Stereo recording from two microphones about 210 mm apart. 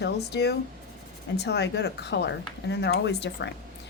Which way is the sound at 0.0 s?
50° left (ahead or behind).